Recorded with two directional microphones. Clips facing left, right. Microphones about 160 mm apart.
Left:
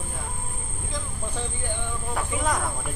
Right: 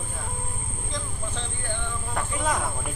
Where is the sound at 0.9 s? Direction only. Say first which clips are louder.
Left 1 dB; 10° left (ahead or behind).